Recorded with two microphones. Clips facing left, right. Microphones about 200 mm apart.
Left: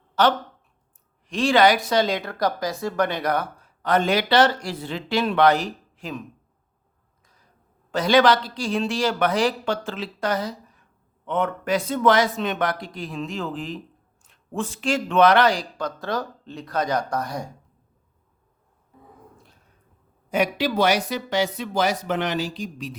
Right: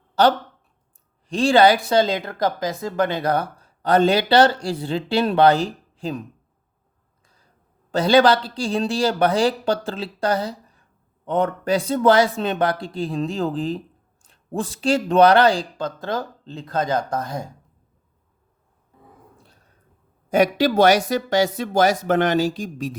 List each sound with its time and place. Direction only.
1.3 s speech: 30° right (ahead or behind)
7.9 s speech: 30° right (ahead or behind)
20.6 s speech: 45° right (ahead or behind)